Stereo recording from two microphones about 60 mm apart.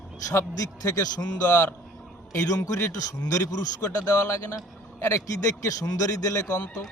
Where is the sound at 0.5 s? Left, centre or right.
Left.